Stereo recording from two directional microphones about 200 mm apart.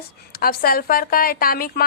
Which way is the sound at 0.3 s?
50° left (ahead or behind).